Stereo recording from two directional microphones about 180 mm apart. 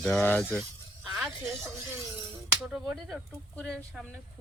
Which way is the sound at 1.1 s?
Centre (ahead or behind).